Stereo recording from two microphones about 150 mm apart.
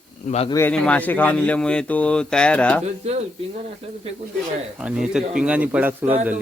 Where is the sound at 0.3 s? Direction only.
45° left (ahead or behind).